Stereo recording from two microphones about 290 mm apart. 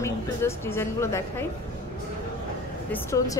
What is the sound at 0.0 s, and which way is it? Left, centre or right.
A woman's voice, centre.